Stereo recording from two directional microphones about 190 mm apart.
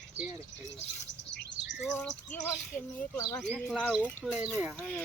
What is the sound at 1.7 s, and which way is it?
Speech, centre (ahead or behind).